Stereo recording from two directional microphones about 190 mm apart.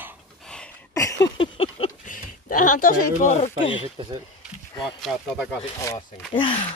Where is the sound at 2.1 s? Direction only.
45° left (ahead or behind).